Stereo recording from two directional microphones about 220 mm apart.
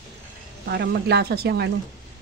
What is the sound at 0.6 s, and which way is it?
Speech, 50° right (ahead or behind).